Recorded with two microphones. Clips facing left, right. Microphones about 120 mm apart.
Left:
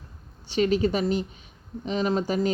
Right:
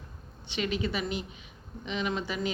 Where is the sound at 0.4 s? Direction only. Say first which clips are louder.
Left 9 dB; 40° left (ahead or behind).